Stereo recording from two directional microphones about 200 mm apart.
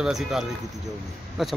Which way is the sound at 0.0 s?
Centre (ahead or behind).